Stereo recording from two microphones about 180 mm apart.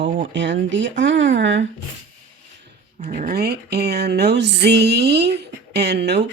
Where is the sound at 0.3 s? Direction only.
85° right.